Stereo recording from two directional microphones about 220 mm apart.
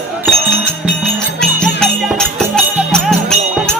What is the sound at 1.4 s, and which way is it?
Music, 5° left (ahead or behind).